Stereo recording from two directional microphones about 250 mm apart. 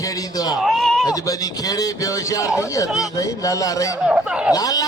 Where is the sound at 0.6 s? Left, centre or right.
Centre.